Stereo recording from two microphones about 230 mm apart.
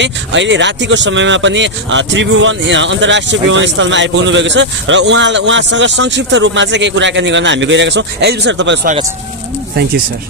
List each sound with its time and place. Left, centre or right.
0.0 s speech: right